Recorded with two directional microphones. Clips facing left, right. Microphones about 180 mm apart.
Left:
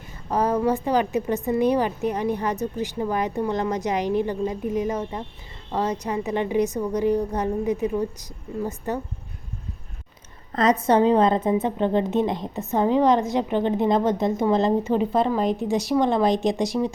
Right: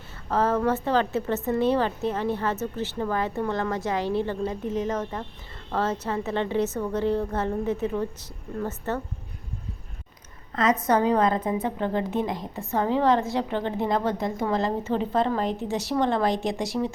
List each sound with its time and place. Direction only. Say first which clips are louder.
0.3 s a woman's voice: left 2 dB; 15° left (ahead or behind)
10.5 s a woman's voice: left 3 dB; 35° left (ahead or behind)
10.8 s a woman's voice: left 4 dB; 25° left (ahead or behind)